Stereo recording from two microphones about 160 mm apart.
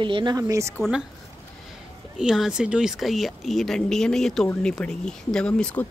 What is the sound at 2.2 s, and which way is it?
Speech, 5° right (ahead or behind).